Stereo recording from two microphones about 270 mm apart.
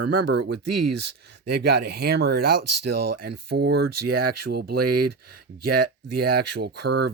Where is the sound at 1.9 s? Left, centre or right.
Right.